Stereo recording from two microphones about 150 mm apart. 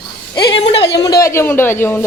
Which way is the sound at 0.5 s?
35° left (ahead or behind).